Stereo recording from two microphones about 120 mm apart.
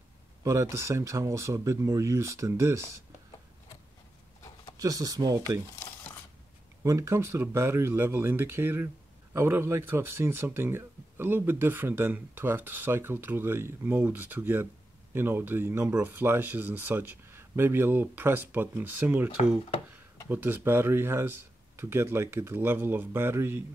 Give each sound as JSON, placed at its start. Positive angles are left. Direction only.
{"t": 0.4, "sound": "speech", "side_deg": -25}
{"t": 4.7, "sound": "speech", "side_deg": -30}
{"t": 6.8, "sound": "speech", "side_deg": -25}